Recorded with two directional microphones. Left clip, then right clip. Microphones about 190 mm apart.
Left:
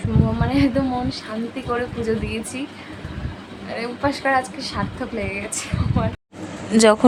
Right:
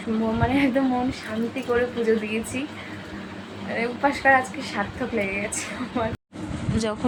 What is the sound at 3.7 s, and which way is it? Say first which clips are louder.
Speech: even; 5° left (ahead or behind).